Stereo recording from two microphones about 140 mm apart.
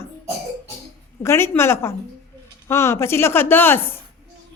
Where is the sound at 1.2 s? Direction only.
20° left (ahead or behind).